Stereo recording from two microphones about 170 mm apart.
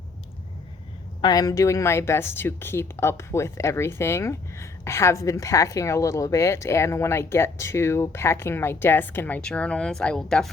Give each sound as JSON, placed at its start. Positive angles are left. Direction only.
{"t": 1.2, "sound": "speech", "side_deg": 25}